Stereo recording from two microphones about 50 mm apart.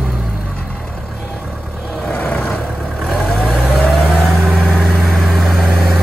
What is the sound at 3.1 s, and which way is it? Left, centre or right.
Vehicle, centre.